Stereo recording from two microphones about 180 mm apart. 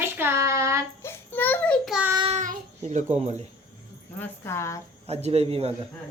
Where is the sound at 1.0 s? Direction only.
10° left (ahead or behind).